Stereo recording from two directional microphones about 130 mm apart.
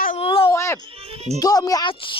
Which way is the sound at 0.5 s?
20° left (ahead or behind).